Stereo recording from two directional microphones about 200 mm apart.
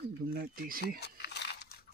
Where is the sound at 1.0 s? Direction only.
55° left (ahead or behind).